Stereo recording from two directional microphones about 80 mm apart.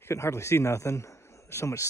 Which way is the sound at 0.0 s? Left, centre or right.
Left.